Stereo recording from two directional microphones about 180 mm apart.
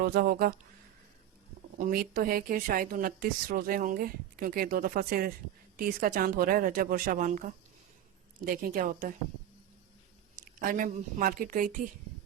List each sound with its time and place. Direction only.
0.0 s speech: 55° right (ahead or behind)
1.8 s speech: 55° right (ahead or behind)
10.4 s speech: 50° right (ahead or behind)